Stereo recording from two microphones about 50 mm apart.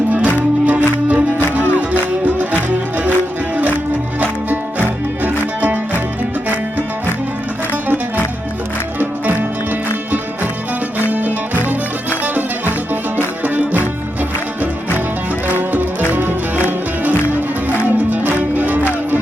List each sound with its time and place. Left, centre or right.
0.6 s music: right
4.2 s music: right
9.0 s music: right
12.2 s music: right
15.4 s music: right